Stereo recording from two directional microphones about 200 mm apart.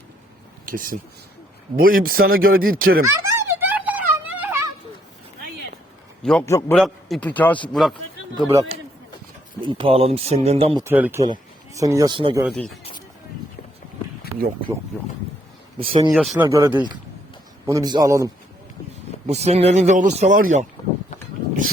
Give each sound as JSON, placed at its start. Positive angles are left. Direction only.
{"t": 0.6, "sound": "speech", "side_deg": -45}
{"t": 3.1, "sound": "a sound", "side_deg": -10}
{"t": 6.4, "sound": "a man's voice", "side_deg": 15}
{"t": 6.7, "sound": "a man's voice", "side_deg": 0}
{"t": 8.4, "sound": "speech", "side_deg": -20}
{"t": 10.8, "sound": "a man's voice", "side_deg": -10}
{"t": 12.5, "sound": "speech", "side_deg": 0}
{"t": 15.8, "sound": "speech", "side_deg": -30}
{"t": 16.1, "sound": "speech", "side_deg": 0}
{"t": 16.5, "sound": "a man's voice", "side_deg": -15}
{"t": 19.3, "sound": "speech", "side_deg": -30}